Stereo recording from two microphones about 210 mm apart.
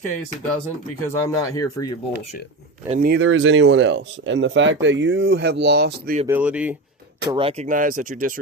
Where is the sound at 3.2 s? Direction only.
65° right (ahead or behind); by 6.1 s 50° right (ahead or behind).